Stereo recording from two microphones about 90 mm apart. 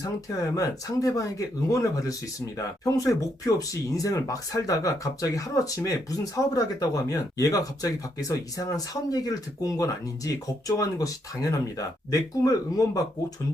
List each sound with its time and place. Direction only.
0.0 s speech: 40° left (ahead or behind)